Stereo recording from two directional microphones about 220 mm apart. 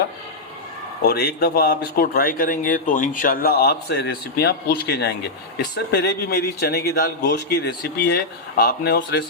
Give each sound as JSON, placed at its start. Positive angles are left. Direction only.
{"t": 1.0, "sound": "speech", "side_deg": 45}